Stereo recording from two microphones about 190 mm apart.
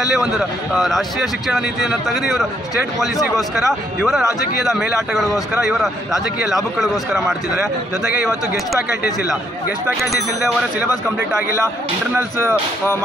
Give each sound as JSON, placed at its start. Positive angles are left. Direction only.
{"t": 0.1, "sound": "a man's voice", "side_deg": 0}
{"t": 9.9, "sound": "a man's voice", "side_deg": 0}
{"t": 12.2, "sound": "speech", "side_deg": -10}